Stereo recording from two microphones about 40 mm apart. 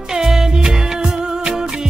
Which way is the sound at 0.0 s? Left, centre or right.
Centre.